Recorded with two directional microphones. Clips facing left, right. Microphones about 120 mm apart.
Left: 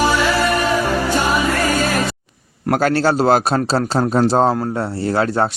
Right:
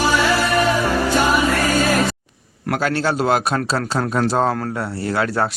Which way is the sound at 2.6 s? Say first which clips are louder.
Left 4 dB; 40° left (ahead or behind).